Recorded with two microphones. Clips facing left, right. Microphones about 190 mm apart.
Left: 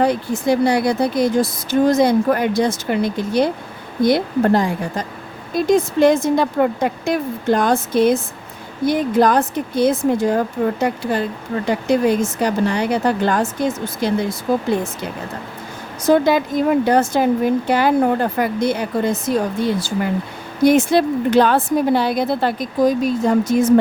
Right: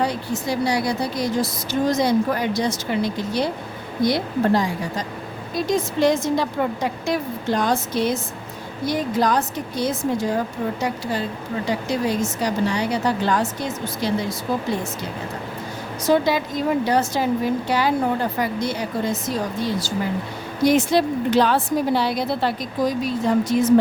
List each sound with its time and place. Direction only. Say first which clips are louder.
0.0 s speech: left 6 dB; 55° left (ahead or behind)
16.0 s speech: left 4 dB; 50° left (ahead or behind)